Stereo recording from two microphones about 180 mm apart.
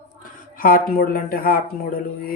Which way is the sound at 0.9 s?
55° left (ahead or behind).